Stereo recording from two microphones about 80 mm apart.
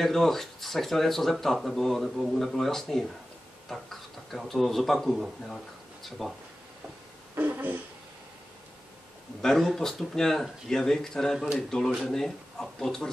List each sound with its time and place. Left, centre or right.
0.0 s speech: centre
7.3 s a sound: right
9.4 s speech: centre